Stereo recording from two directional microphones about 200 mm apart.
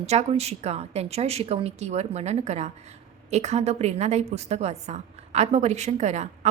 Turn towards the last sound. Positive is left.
turn(degrees=-35)  # may be behind; listen again after turning